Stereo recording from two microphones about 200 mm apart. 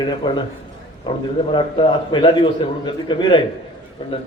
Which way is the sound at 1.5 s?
25° left (ahead or behind).